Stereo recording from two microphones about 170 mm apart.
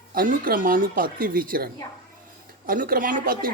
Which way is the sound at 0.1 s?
55° right (ahead or behind).